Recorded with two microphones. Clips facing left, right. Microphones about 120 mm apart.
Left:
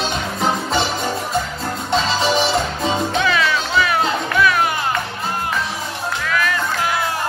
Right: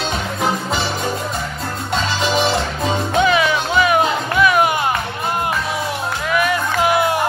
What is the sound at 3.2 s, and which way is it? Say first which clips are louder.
Music: right 3 dB; 20° right (ahead or behind).